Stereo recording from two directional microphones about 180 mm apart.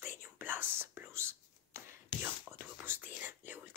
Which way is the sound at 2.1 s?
30° left (ahead or behind).